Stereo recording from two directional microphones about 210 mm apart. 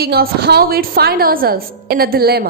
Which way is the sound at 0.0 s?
50° right (ahead or behind).